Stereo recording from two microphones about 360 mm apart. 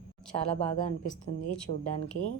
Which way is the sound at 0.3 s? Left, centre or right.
Centre.